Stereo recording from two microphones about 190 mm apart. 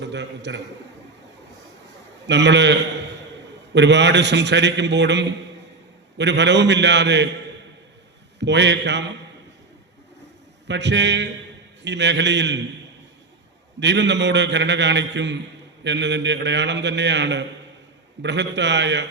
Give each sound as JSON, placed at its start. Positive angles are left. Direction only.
{"t": 0.0, "sound": "a man's voice", "side_deg": -65}
{"t": 2.2, "sound": "a man's voice", "side_deg": -65}
{"t": 3.8, "sound": "a man's voice", "side_deg": -65}
{"t": 8.4, "sound": "a man's voice", "side_deg": -65}
{"t": 10.7, "sound": "a man's voice", "side_deg": -65}
{"t": 13.7, "sound": "a man's voice", "side_deg": -65}